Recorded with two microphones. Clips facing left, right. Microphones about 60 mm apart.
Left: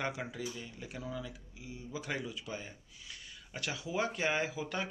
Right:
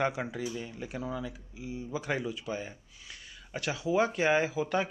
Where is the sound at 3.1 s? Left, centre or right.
Centre.